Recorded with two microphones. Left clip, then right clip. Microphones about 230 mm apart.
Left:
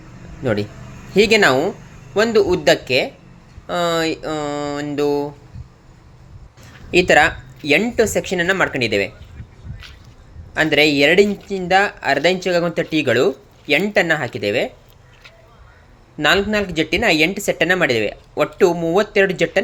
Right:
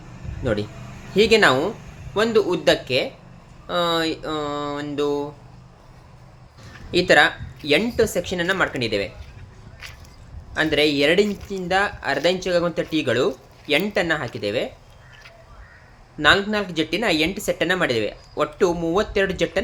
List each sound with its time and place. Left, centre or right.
0.4 s speech: centre
6.9 s speech: centre
10.5 s speech: centre
16.1 s speech: centre